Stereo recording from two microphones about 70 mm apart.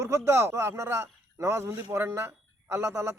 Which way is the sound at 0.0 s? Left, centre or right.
Right.